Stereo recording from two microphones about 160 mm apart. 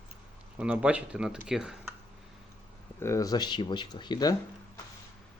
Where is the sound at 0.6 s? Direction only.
10° right (ahead or behind).